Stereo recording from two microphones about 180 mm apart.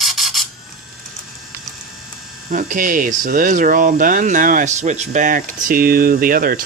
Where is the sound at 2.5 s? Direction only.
45° right (ahead or behind).